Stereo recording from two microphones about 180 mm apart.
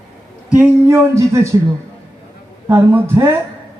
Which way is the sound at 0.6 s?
15° right (ahead or behind).